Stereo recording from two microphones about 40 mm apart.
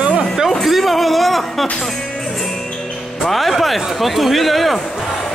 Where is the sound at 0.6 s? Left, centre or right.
Centre.